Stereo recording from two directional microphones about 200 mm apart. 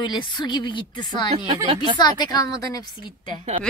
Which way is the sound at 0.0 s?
20° left (ahead or behind).